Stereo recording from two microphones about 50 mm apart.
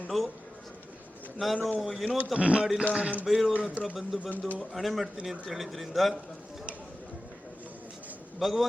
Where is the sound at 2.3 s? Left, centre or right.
Right.